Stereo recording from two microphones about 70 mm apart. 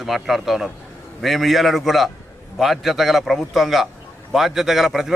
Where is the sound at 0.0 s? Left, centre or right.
Centre.